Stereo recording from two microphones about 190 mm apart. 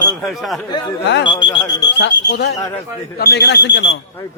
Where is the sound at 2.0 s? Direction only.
60° left (ahead or behind).